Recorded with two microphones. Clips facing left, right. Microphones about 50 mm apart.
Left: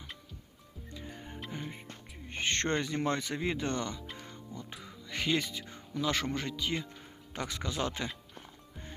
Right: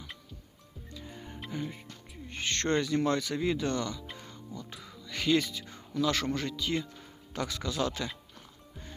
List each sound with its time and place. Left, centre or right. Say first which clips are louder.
1.0 s music: even; centre
2.8 s speech: right 4 dB; left
4.0 s music: even; centre
4.5 s speech: right 2 dB; centre